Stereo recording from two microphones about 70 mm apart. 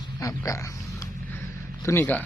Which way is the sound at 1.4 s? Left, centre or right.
Left.